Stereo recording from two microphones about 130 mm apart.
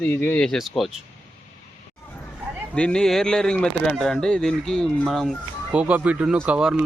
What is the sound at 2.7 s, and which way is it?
Speech, 5° left (ahead or behind).